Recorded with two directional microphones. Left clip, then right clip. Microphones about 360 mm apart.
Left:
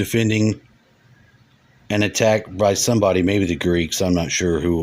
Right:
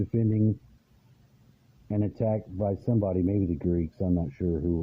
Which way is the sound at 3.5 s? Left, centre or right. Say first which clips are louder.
Left 10 dB; centre.